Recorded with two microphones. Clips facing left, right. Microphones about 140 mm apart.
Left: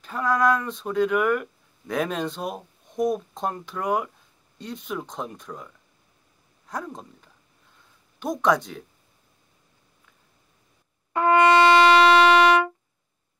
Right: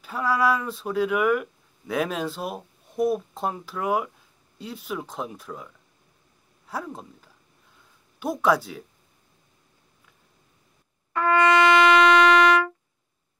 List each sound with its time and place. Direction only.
0.0 s speech: 5° right (ahead or behind)
6.7 s speech: 5° right (ahead or behind)
11.1 s brass instrument: 25° left (ahead or behind)